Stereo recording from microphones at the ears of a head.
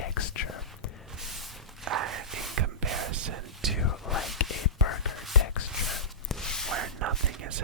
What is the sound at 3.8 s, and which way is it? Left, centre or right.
Whispering, left.